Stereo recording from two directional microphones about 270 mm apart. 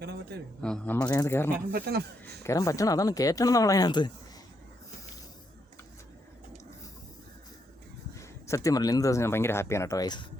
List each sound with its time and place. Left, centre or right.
0.0 s a sound: right
0.6 s speech: centre
1.7 s a man's voice: right
2.4 s speech: centre
8.2 s speech: centre